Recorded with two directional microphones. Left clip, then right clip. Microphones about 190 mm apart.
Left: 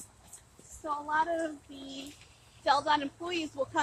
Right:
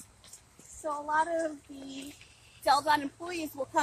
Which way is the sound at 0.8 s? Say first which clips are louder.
Right 1 dB; 60° right (ahead or behind).